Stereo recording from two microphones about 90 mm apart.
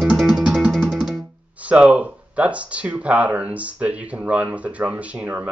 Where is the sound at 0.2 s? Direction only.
5° right (ahead or behind).